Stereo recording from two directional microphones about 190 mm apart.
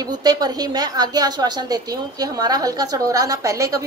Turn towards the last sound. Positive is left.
turn(degrees=-15)  # may be behind; listen again after turning